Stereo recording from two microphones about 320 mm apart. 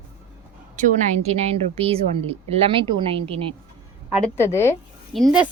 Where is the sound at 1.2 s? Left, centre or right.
Centre.